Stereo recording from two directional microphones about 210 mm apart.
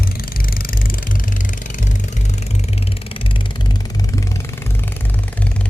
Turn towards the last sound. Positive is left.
turn(degrees=15)  # may be behind; listen again after turning